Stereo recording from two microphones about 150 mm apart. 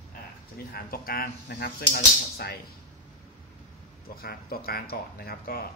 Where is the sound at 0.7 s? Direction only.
90° left.